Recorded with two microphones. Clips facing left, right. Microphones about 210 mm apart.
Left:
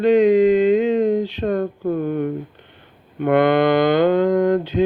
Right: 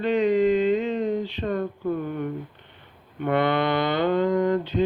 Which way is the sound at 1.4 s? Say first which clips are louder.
Left 6 dB; 50° left (ahead or behind).